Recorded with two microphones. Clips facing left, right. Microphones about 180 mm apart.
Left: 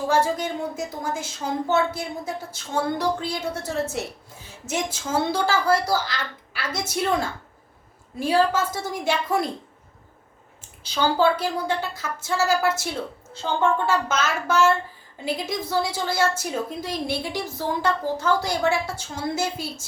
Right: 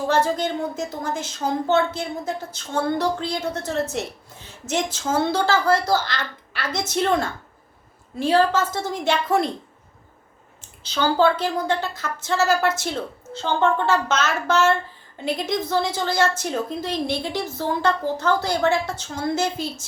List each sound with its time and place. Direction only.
0.1 s a woman's voice: 10° left (ahead or behind)
10.8 s a woman's voice: 10° left (ahead or behind)